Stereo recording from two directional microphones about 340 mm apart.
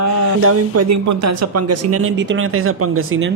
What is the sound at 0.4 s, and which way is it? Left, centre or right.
Speech, right.